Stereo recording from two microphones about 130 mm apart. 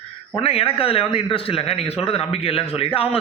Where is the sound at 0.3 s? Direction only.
45° left (ahead or behind).